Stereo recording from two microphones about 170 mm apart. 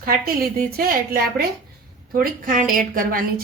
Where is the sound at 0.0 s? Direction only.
60° right (ahead or behind).